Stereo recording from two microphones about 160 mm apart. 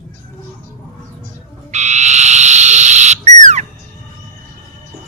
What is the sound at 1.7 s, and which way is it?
Frog, 45° right (ahead or behind).